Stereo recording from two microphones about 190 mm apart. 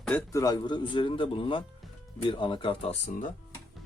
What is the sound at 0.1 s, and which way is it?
Speech, 20° left (ahead or behind).